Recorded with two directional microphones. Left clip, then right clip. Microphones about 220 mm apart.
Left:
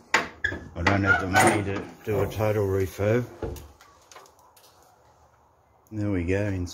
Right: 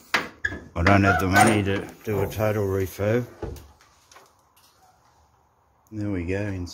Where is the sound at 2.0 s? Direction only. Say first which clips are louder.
Even; 20° right (ahead or behind).